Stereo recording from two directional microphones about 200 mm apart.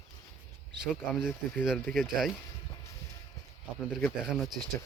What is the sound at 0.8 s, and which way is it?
Speech, 5° right (ahead or behind).